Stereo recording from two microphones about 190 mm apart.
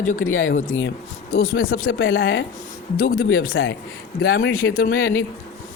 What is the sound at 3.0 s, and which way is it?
Speech, 50° left (ahead or behind).